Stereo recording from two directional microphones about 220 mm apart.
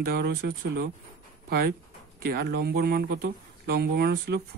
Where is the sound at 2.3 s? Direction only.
45° right (ahead or behind).